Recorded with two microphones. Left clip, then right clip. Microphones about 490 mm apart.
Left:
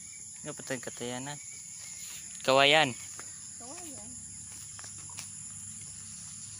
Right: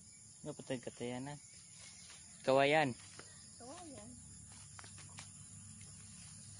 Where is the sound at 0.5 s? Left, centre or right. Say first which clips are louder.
Left 7 dB; right.